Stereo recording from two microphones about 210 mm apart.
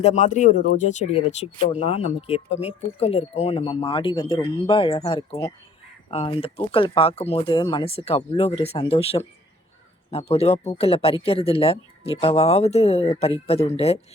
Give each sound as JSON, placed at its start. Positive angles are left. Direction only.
{"t": 0.0, "sound": "speech", "side_deg": 35}